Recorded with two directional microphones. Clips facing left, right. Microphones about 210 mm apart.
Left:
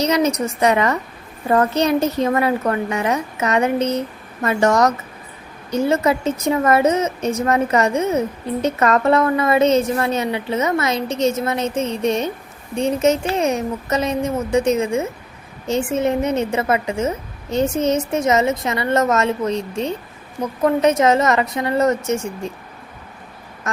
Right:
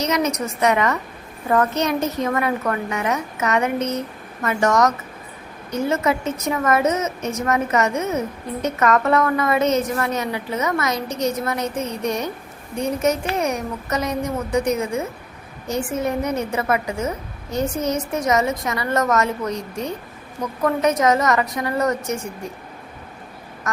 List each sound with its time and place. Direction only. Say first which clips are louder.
0.0 s a woman's voice: left 4 dB; 30° left (ahead or behind)